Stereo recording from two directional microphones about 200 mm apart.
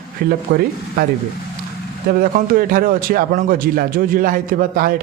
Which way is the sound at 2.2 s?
45° right (ahead or behind).